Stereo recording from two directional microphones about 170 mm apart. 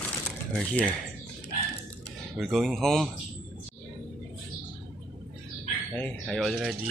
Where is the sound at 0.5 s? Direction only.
10° left (ahead or behind).